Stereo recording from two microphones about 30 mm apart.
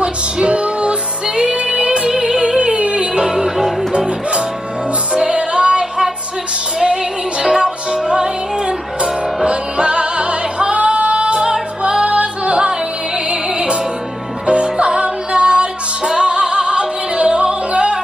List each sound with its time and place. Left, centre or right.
0.0 s music: right
1.2 s music: right
2.4 s music: right
5.1 s music: right
12.0 s music: right